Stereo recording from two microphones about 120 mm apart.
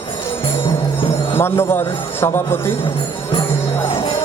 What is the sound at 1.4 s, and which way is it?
Speech, 20° left (ahead or behind).